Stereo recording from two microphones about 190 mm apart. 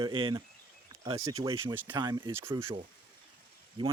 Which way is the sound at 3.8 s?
25° right (ahead or behind).